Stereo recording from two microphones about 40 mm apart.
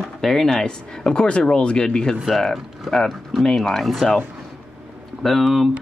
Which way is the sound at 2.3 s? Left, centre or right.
Centre.